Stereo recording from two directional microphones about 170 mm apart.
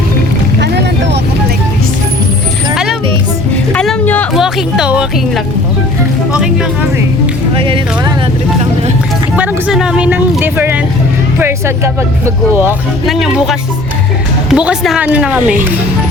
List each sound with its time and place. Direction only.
0.6 s vehicle: 80° right
3.8 s music: 5° left (ahead or behind)
4.4 s speech: 5° right (ahead or behind)
7.5 s speech: 30° right (ahead or behind)
9.3 s speech: 10° right (ahead or behind)
12.2 s speech: 15° right (ahead or behind)
13.1 s speech: centre (ahead or behind)